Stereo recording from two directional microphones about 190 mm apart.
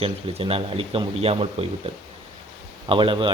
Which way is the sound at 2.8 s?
25° right (ahead or behind).